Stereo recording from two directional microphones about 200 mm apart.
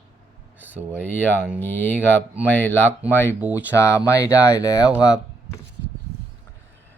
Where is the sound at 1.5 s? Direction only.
10° left (ahead or behind).